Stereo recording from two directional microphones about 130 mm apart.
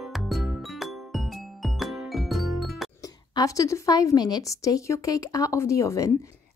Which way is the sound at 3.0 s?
25° left (ahead or behind).